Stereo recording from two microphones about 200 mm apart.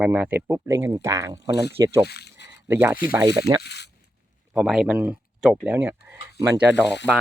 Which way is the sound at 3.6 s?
55° left (ahead or behind).